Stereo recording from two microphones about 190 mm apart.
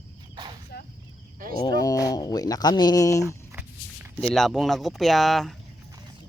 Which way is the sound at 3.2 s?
10° right (ahead or behind).